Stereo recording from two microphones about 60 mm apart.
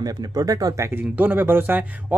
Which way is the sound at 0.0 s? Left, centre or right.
Right.